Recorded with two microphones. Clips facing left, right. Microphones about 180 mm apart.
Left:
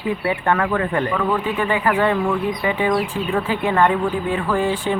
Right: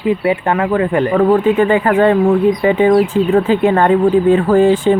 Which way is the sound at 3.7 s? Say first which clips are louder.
Right 7 dB; 45° right (ahead or behind).